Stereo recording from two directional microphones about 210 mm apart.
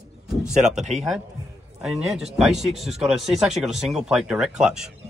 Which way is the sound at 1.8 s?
Centre (ahead or behind).